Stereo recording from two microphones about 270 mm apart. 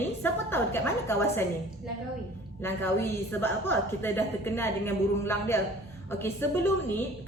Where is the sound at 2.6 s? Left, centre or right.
Centre.